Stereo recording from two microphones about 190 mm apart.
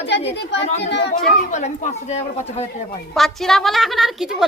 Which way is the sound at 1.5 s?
40° left (ahead or behind).